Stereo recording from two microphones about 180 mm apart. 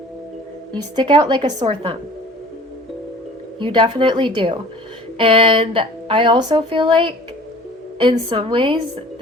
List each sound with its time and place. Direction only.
0.7 s speech: 25° right (ahead or behind)
3.6 s speech: 25° right (ahead or behind)